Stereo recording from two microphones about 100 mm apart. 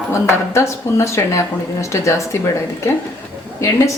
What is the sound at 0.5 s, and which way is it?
A woman's voice, 30° left (ahead or behind).